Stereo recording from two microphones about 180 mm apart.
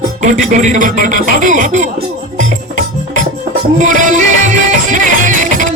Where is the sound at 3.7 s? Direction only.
45° right (ahead or behind).